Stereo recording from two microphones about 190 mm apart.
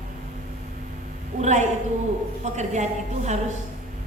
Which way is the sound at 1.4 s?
40° right (ahead or behind).